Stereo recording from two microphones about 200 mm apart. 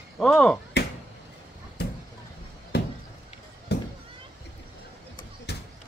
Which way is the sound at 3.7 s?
55° left (ahead or behind).